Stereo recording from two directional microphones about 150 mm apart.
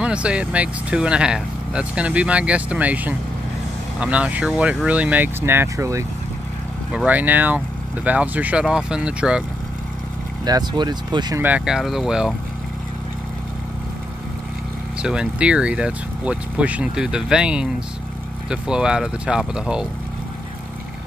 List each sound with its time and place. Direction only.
0.0 s speech: 5° right (ahead or behind)
6.9 s speech: 10° right (ahead or behind)
10.4 s speech: 30° right (ahead or behind)
11.3 s speech: 10° right (ahead or behind)
15.0 s speech: 5° right (ahead or behind)